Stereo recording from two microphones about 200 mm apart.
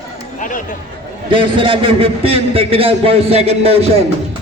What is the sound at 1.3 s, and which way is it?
A man's voice, 25° right (ahead or behind).